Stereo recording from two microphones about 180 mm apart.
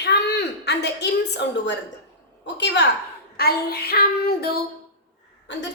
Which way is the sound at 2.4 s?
75° left (ahead or behind).